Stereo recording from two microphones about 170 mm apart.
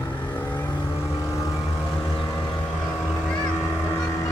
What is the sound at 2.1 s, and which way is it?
Boat, 20° left (ahead or behind).